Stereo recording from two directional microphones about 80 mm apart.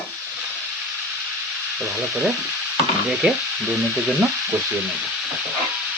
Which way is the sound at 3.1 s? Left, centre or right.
Centre.